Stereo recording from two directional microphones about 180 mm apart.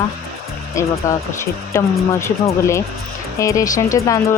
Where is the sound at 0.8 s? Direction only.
15° left (ahead or behind).